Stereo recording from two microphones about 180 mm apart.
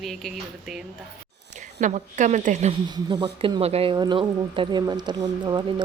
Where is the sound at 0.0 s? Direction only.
Centre (ahead or behind).